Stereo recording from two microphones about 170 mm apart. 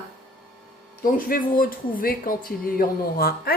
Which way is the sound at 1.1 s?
55° left (ahead or behind).